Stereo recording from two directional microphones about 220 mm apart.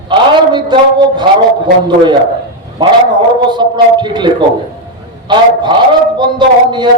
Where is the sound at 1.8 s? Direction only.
20° right (ahead or behind).